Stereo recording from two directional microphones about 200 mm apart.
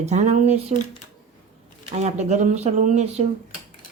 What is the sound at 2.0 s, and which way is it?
Speech, 35° right (ahead or behind).